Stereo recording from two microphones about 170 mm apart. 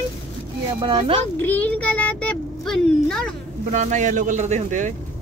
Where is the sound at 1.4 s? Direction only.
10° left (ahead or behind).